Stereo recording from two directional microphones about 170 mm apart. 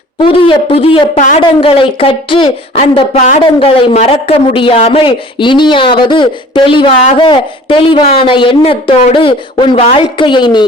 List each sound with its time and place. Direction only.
0.2 s a woman's voice: 30° left (ahead or behind)